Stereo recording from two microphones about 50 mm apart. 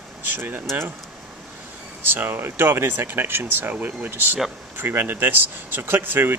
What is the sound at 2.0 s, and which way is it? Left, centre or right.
Speech, right.